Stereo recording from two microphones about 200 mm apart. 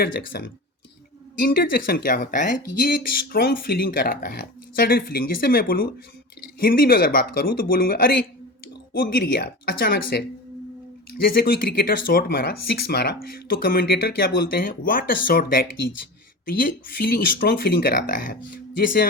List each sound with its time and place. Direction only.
0.0 s speech: 50° left (ahead or behind)